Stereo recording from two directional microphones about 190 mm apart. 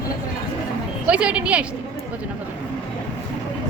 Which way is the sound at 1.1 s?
5° right (ahead or behind).